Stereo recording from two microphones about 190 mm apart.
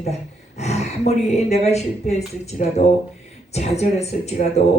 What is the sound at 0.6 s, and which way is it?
Speech, 35° left (ahead or behind).